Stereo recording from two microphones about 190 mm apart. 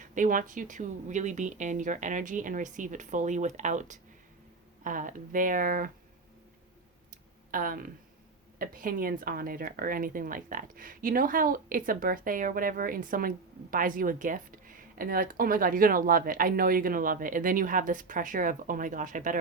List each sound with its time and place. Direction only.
0.0 s a woman's voice: 45° right (ahead or behind)
7.5 s a woman's voice: 45° right (ahead or behind)